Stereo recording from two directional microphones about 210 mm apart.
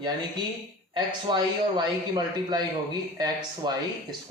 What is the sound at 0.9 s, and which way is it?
A man's voice, 20° right (ahead or behind).